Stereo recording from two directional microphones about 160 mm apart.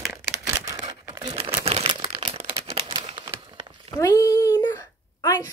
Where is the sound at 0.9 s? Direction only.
25° right (ahead or behind).